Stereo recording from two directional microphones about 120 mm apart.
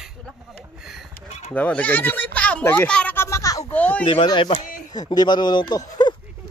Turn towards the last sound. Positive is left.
turn(degrees=35)  # may be behind; listen again after turning